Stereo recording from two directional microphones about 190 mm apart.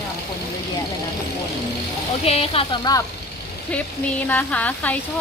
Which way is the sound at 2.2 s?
30° left (ahead or behind).